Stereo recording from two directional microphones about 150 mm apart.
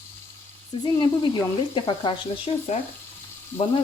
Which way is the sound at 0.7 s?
35° left (ahead or behind).